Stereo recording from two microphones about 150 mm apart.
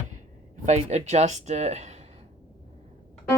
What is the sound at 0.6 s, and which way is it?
Speech, 50° right (ahead or behind).